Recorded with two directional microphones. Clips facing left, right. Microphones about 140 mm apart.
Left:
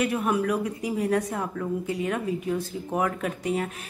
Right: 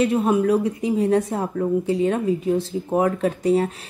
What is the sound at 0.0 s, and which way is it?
Speech, 25° right (ahead or behind).